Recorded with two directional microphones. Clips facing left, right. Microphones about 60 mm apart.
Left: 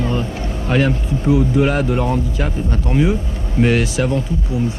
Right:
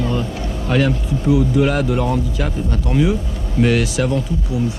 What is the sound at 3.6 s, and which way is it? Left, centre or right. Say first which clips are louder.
Speech: even; left.